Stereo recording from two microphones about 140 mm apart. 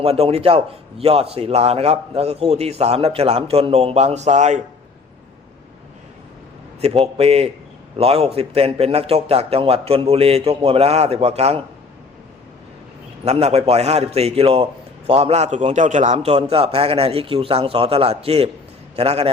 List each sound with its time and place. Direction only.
0.0 s a man's voice: 45° right (ahead or behind)
6.8 s a man's voice: 45° right (ahead or behind)
13.2 s a man's voice: 50° right (ahead or behind)